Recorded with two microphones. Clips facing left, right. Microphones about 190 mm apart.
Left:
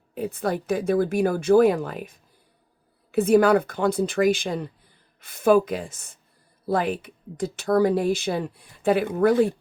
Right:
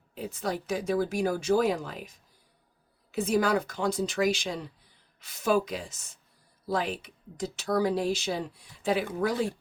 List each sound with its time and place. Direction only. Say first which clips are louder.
0.1 s speech: left 6 dB; 55° left (ahead or behind)